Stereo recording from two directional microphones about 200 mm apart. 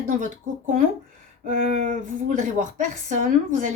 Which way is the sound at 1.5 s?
40° right (ahead or behind).